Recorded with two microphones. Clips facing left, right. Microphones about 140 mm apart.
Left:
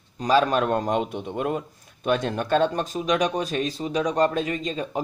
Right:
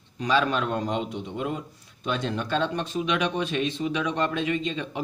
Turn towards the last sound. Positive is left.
turn(degrees=40)  # may be behind; listen again after turning